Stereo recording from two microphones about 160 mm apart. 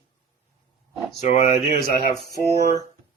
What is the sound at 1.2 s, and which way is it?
Speech, 45° left (ahead or behind).